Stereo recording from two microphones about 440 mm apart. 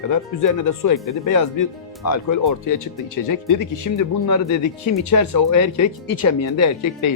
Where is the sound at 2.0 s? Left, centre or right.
Left.